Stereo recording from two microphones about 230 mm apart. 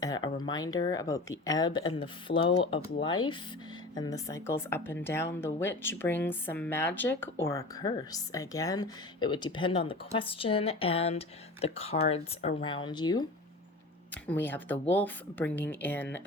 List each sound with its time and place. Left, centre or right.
0.0 s speech: centre
14.3 s speech: centre